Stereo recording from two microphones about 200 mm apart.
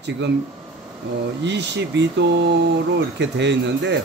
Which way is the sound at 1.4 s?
60° right (ahead or behind).